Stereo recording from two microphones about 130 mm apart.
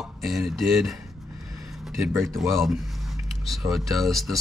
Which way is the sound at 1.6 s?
Centre (ahead or behind).